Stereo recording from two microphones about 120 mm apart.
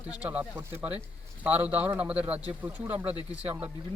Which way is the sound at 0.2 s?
10° right (ahead or behind).